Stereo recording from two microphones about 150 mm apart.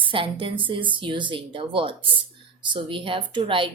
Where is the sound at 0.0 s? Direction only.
35° right (ahead or behind).